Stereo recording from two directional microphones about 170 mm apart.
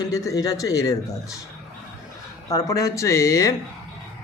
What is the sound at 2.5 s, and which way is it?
Speech, 20° left (ahead or behind).